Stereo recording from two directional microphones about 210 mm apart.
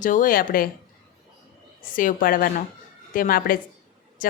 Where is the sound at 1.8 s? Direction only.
40° left (ahead or behind).